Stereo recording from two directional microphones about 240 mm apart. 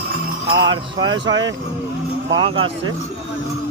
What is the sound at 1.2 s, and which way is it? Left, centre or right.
Speech, right.